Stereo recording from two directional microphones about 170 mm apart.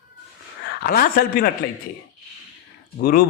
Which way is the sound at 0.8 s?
60° left (ahead or behind).